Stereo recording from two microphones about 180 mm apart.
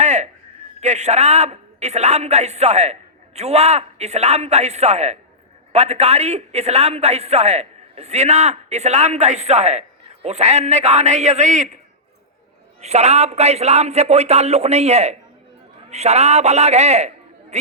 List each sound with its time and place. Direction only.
0.0 s a sound: 40° right (ahead or behind)
0.8 s a man's voice: 40° right (ahead or behind)
12.8 s a man's voice: 35° right (ahead or behind)